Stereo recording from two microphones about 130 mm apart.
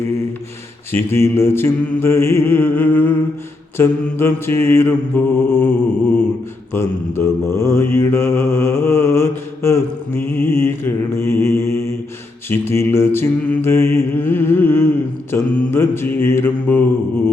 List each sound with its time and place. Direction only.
0.9 s mantra: 20° left (ahead or behind)